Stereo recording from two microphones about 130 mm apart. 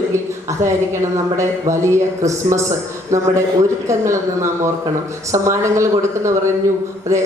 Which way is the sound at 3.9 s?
20° right (ahead or behind).